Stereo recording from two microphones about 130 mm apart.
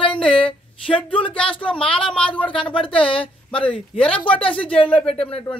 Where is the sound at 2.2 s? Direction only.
10° left (ahead or behind).